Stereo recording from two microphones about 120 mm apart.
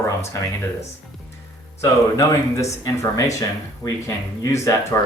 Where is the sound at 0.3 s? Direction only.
25° left (ahead or behind).